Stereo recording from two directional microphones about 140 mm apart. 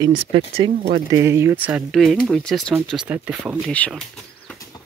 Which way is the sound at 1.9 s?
Centre (ahead or behind).